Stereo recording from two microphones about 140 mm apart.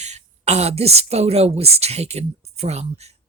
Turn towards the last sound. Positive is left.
turn(degrees=-50)  # may be behind; listen again after turning